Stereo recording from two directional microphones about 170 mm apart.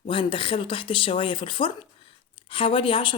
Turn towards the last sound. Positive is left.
turn(degrees=30)  # may be behind; listen again after turning